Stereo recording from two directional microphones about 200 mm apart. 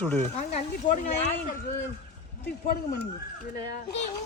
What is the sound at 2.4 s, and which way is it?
Speech, 55° left (ahead or behind).